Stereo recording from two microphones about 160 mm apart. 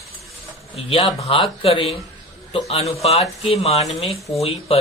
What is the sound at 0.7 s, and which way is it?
Speech, 35° left (ahead or behind).